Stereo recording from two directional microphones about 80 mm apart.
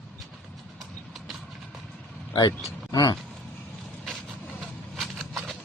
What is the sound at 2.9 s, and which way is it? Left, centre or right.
Speech, left.